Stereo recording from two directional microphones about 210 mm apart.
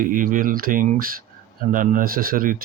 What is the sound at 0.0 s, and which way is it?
Speech, 40° right (ahead or behind).